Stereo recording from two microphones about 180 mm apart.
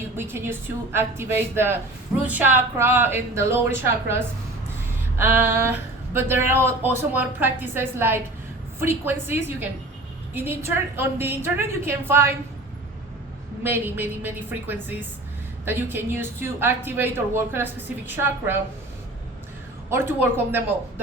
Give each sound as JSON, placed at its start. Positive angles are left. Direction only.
{"t": 0.2, "sound": "speech", "side_deg": -15}
{"t": 5.1, "sound": "speech", "side_deg": -10}
{"t": 13.7, "sound": "speech", "side_deg": -10}
{"t": 19.9, "sound": "speech", "side_deg": -10}